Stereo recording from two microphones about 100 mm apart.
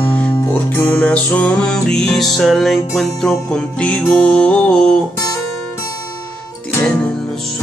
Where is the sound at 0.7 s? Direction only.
20° left (ahead or behind).